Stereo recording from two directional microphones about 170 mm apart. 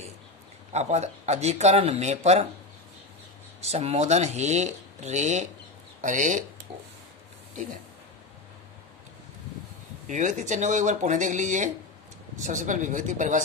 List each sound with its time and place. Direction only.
0.7 s speech: 40° right (ahead or behind)
3.6 s speech: 40° right (ahead or behind)
10.0 s speech: 45° right (ahead or behind)